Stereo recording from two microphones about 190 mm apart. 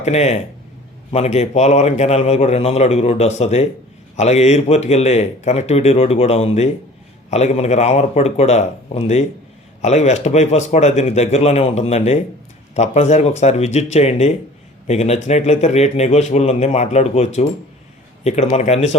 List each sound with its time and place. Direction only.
0.0 s a man's voice: 35° left (ahead or behind)